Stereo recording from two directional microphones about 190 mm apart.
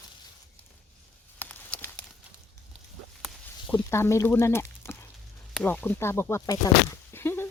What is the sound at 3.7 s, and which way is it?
Speech, 15° left (ahead or behind).